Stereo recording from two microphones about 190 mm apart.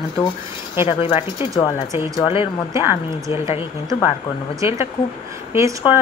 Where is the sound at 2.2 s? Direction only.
30° left (ahead or behind).